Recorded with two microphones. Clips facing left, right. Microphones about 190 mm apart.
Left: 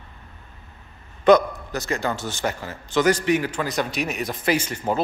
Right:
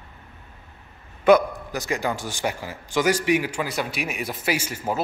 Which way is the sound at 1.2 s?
10° right (ahead or behind).